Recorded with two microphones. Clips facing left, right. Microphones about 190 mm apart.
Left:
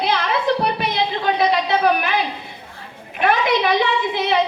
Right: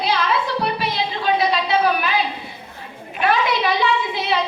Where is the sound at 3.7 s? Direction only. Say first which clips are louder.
Left 1 dB; 55° left (ahead or behind).